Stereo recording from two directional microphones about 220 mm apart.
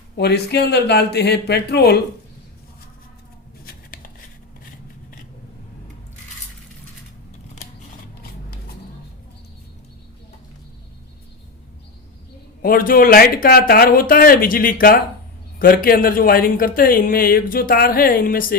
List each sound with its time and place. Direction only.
0.2 s speech: 50° left (ahead or behind)
12.6 s speech: 40° left (ahead or behind)